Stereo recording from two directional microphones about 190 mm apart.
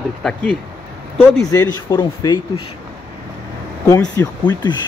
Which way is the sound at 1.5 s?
20° left (ahead or behind).